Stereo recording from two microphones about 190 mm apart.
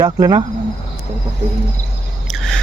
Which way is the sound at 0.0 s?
20° right (ahead or behind).